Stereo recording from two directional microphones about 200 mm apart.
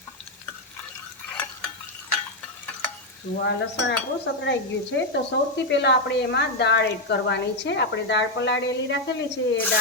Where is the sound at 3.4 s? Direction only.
60° left (ahead or behind).